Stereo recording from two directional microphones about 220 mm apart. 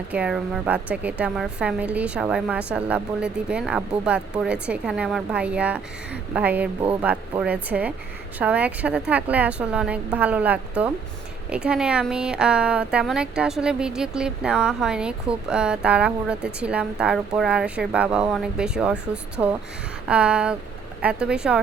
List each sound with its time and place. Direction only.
0.1 s a woman's voice: 5° right (ahead or behind)